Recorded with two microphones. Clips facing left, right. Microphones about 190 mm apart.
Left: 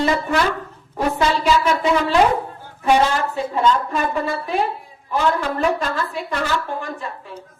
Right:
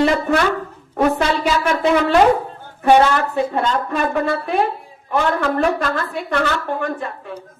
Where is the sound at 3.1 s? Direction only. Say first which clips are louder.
Right 3 dB; 60° right (ahead or behind).